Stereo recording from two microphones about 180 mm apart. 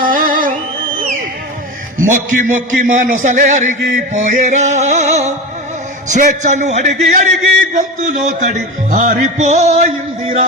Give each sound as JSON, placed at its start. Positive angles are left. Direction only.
{"t": 0.0, "sound": "music", "side_deg": -50}
{"t": 2.0, "sound": "music", "side_deg": -45}